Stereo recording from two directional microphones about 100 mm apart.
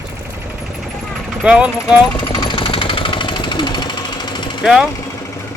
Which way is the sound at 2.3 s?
50° left (ahead or behind).